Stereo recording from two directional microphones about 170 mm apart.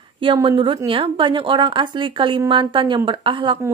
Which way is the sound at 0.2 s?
30° right (ahead or behind).